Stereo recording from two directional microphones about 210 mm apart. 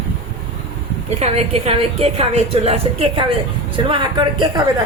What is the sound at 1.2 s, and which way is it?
A woman's voice, 30° right (ahead or behind).